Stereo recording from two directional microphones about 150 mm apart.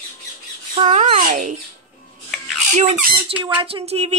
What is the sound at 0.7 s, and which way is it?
Speech, 50° right (ahead or behind).